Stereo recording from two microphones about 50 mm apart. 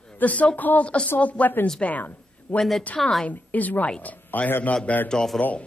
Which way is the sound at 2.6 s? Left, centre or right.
Centre.